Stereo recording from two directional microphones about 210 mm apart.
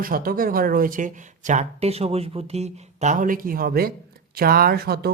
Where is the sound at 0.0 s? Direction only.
45° right (ahead or behind).